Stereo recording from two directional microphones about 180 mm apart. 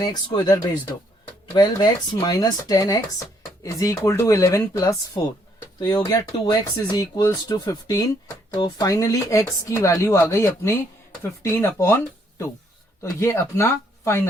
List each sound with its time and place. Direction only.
0.0 s speech: 20° left (ahead or behind)
13.0 s speech: 15° left (ahead or behind)